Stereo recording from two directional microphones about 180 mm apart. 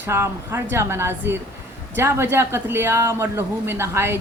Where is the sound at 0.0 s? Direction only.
15° right (ahead or behind).